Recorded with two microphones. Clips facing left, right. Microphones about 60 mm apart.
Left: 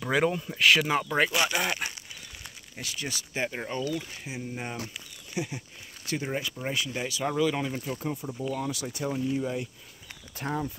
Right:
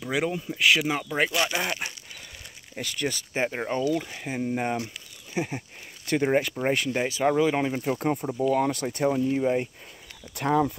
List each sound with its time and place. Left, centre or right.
0.1 s speech: centre
2.8 s speech: right
3.4 s speech: right
4.4 s speech: right
6.0 s speech: right
7.8 s speech: right
10.3 s speech: right